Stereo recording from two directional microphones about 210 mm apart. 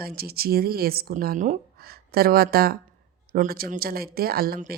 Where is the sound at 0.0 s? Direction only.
45° right (ahead or behind).